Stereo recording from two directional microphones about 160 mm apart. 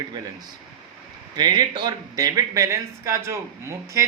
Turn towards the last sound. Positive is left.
turn(degrees=-20)  # may be behind; listen again after turning